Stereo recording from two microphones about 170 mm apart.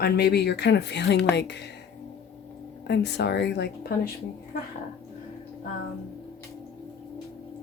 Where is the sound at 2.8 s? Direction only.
80° left.